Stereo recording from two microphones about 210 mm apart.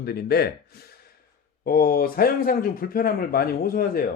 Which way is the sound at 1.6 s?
45° left (ahead or behind).